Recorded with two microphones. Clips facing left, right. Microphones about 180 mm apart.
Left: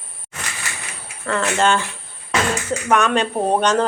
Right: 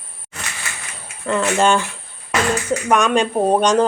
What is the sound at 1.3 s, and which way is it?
Speech, 15° right (ahead or behind).